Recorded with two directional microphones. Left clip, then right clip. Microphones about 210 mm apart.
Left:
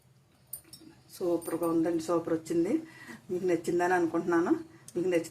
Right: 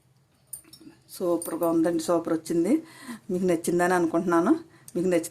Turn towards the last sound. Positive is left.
turn(degrees=-50)  # may be behind; listen again after turning